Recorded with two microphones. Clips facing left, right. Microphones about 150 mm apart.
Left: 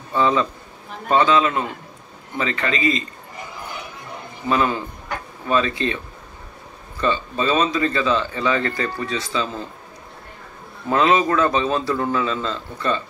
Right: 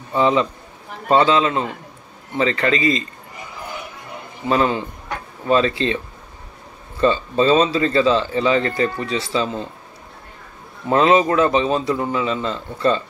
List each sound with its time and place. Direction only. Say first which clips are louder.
0.1 s a man's voice: right 2 dB; 20° right (ahead or behind)
4.5 s a man's voice: right 2 dB; 35° right (ahead or behind)
7.0 s speech: right 5 dB; 30° right (ahead or behind)
10.9 s speech: right 3 dB; 25° right (ahead or behind)